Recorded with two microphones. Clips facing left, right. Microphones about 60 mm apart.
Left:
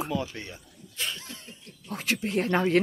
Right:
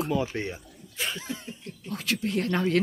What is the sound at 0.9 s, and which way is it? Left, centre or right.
Cough, centre.